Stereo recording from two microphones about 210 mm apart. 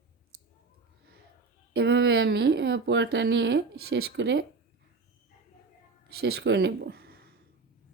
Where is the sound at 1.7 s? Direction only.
50° right (ahead or behind).